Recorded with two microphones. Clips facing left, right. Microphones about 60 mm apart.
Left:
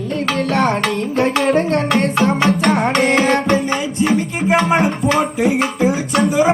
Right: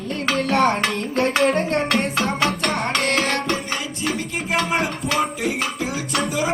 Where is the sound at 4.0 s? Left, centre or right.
Left.